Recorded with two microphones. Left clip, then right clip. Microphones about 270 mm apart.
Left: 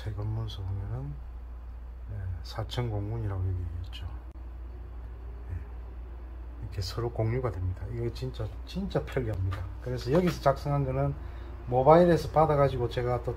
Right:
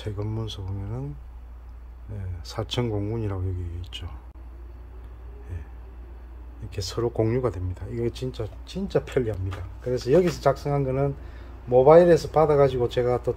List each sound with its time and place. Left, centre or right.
2.4 s speech: right
6.7 s speech: right